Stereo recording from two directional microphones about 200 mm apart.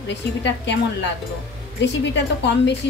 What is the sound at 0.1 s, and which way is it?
Speech, 60° left (ahead or behind).